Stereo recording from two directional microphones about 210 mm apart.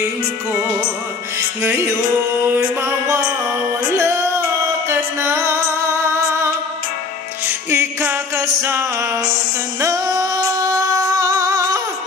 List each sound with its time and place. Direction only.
1.6 s music: 10° right (ahead or behind)
9.8 s female singing: 15° right (ahead or behind)